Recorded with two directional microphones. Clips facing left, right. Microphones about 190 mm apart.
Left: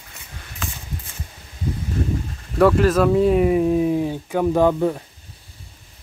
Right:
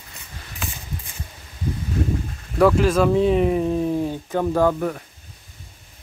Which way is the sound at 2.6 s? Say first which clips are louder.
Left 1 dB; centre (ahead or behind).